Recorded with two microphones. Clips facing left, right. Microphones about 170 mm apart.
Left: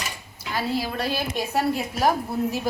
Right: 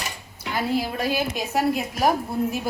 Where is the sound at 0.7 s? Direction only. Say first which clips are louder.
Right 3 dB; 15° right (ahead or behind).